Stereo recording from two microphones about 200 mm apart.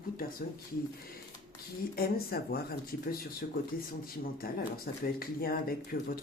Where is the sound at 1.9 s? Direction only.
50° left (ahead or behind).